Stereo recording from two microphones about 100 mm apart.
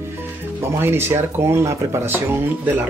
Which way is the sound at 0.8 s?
25° right (ahead or behind).